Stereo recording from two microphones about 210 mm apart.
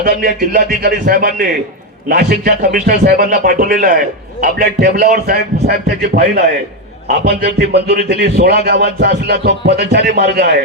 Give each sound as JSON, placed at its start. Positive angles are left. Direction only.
{"t": 0.0, "sound": "a man's voice", "side_deg": -45}